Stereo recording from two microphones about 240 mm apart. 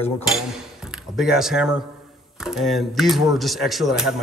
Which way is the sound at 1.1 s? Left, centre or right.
Centre.